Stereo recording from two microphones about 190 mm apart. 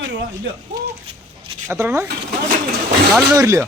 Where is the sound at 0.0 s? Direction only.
70° right (ahead or behind).